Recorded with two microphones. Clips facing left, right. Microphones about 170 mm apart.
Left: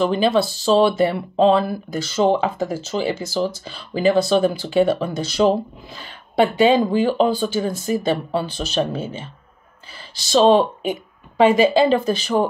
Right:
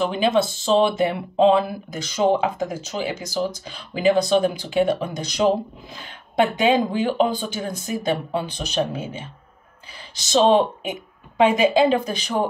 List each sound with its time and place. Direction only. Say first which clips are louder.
0.2 s speech: left 2 dB; 20° right (ahead or behind)
6.6 s speech: left 6 dB; 15° right (ahead or behind)
10.3 s speech: left 2 dB; 20° right (ahead or behind)